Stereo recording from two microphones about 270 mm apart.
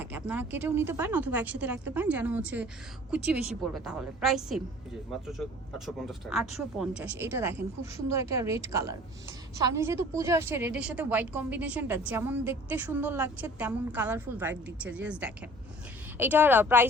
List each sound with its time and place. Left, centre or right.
0.0 s a woman's voice: centre